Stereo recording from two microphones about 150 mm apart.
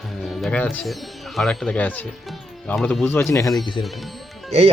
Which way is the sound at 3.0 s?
15° left (ahead or behind).